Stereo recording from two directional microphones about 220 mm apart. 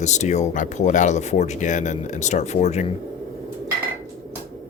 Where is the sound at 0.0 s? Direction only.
30° left (ahead or behind).